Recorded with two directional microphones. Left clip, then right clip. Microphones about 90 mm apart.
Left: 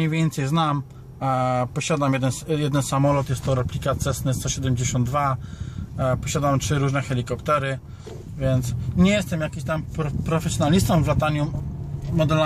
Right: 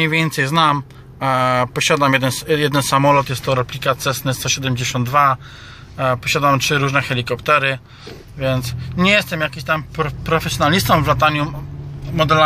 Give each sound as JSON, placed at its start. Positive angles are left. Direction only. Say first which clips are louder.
{"t": 0.0, "sound": "speech", "louder": "right 9 dB", "side_deg": 15}